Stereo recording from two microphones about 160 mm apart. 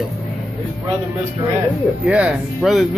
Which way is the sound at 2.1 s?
5° right (ahead or behind).